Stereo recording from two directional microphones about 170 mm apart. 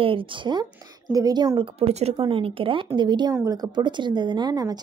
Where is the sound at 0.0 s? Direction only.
30° right (ahead or behind).